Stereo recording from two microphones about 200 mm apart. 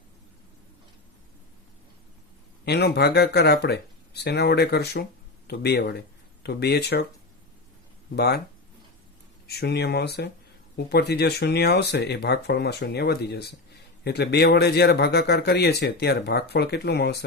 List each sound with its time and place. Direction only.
2.6 s speech: 55° left (ahead or behind)
8.1 s speech: 55° left (ahead or behind)
9.5 s speech: 55° left (ahead or behind)